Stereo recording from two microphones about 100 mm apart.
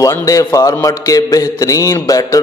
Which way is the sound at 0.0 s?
35° left (ahead or behind).